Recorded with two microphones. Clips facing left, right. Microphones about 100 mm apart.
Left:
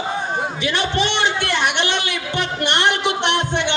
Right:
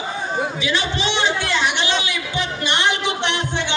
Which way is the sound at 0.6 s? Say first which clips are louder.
Left 2 dB; 55° left (ahead or behind).